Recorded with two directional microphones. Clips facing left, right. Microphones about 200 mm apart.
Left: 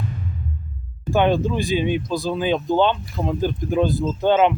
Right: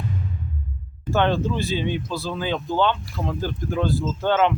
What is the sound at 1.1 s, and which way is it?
Speech, 15° left (ahead or behind).